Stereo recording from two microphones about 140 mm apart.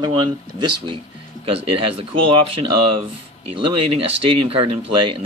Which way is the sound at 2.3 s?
40° right (ahead or behind).